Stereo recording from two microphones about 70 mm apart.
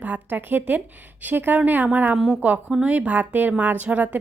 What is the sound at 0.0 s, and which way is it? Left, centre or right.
A woman's voice, right.